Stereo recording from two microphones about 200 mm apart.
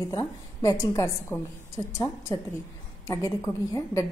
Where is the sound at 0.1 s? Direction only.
20° left (ahead or behind).